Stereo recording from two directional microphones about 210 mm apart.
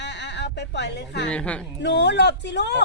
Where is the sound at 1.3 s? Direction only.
5° left (ahead or behind).